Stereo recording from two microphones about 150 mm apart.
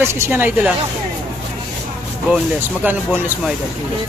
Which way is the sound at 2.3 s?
10° right (ahead or behind).